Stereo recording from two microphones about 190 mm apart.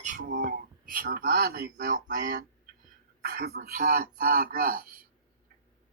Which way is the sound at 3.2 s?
55° right (ahead or behind).